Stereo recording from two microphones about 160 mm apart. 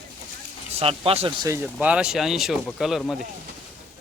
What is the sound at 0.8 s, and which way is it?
Speech, 35° right (ahead or behind).